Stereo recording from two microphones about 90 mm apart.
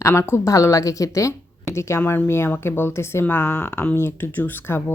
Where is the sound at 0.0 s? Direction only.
30° left (ahead or behind).